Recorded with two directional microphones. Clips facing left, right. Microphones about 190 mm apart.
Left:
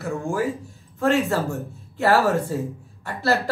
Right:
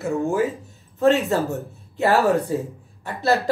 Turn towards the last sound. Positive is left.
turn(degrees=-20)  # may be behind; listen again after turning